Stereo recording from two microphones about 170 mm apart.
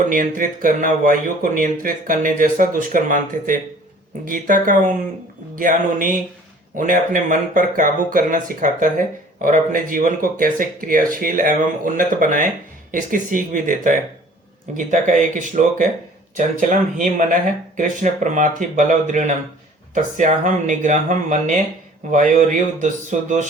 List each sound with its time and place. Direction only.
0.1 s speech: 50° right (ahead or behind)